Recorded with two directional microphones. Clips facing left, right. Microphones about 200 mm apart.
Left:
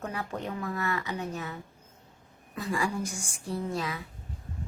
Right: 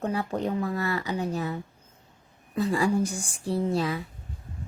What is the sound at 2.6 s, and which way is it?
Speech, 35° right (ahead or behind).